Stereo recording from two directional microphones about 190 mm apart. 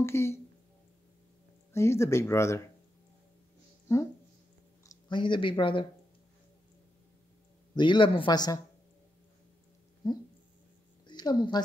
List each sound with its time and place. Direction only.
0.0 s speech: 15° left (ahead or behind)
1.7 s speech: 15° left (ahead or behind)
4.8 s speech: 25° left (ahead or behind)
7.7 s speech: 25° left (ahead or behind)
11.1 s a woman's voice: 20° left (ahead or behind)